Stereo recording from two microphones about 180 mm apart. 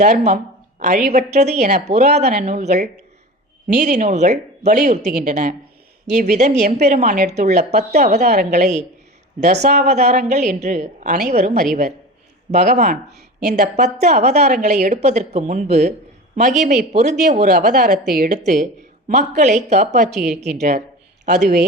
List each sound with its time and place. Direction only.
0.0 s a woman's voice: 40° right (ahead or behind)